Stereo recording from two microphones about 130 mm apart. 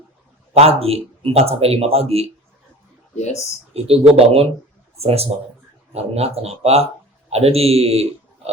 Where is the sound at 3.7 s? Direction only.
50° right (ahead or behind).